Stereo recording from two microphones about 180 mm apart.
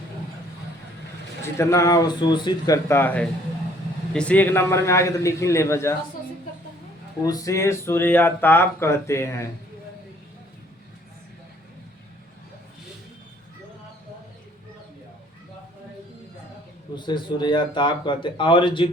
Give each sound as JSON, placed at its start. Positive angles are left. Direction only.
{"t": 1.5, "sound": "speech", "side_deg": 20}
{"t": 7.3, "sound": "speech", "side_deg": 20}
{"t": 16.9, "sound": "speech", "side_deg": 25}